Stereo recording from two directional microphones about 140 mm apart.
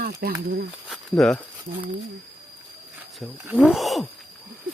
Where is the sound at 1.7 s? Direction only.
50° right (ahead or behind).